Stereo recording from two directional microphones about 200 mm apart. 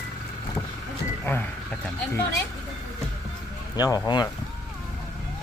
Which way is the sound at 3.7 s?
20° left (ahead or behind).